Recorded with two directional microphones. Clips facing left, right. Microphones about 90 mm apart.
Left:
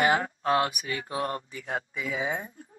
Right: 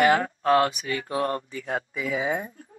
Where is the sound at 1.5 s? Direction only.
5° left (ahead or behind).